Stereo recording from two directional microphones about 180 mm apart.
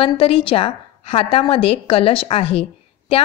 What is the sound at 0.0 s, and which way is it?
A woman's voice, 30° left (ahead or behind).